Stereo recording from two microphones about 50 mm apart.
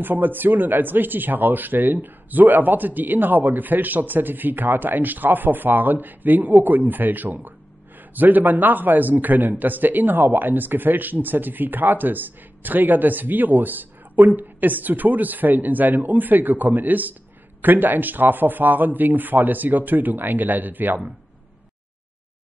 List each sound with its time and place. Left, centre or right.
0.0 s a man's voice: right